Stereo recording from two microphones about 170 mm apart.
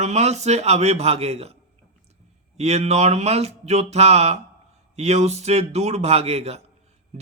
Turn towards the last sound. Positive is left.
turn(degrees=-40)  # may be behind; listen again after turning